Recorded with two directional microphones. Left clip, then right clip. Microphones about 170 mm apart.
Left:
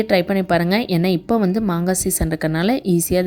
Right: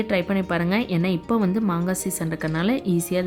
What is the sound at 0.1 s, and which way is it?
A woman's voice, 20° left (ahead or behind).